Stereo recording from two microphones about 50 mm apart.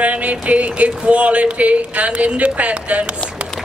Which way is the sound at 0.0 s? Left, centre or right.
Right.